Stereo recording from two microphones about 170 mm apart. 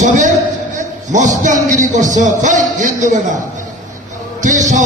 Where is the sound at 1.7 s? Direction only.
45° right (ahead or behind).